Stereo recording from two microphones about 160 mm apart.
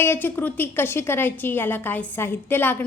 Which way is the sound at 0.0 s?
15° left (ahead or behind).